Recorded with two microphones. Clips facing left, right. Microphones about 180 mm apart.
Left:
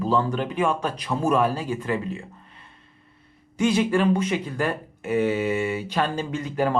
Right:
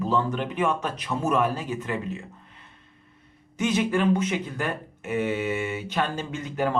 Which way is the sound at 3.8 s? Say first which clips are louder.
Even; 30° left (ahead or behind).